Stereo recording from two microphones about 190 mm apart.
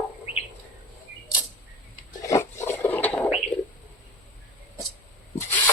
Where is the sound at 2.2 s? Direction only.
15° left (ahead or behind).